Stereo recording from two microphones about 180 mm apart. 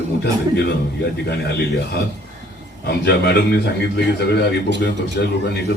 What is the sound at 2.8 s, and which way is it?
A man's voice, 65° left (ahead or behind).